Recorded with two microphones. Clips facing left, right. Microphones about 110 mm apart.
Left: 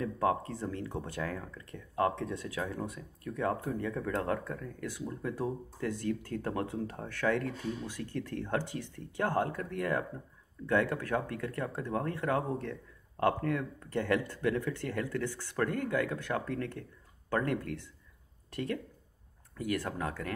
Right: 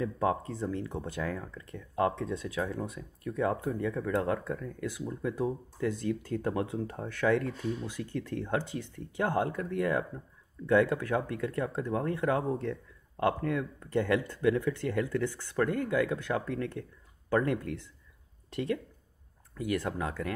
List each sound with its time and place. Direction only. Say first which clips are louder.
0.0 s speech: right 1 dB; 20° right (ahead or behind)